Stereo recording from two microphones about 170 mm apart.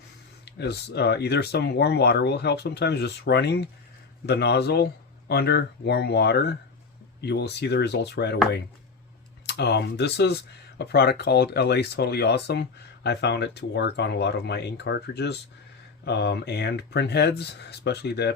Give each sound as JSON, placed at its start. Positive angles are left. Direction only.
{"t": 0.4, "sound": "speech", "side_deg": 80}
{"t": 9.5, "sound": "speech", "side_deg": 80}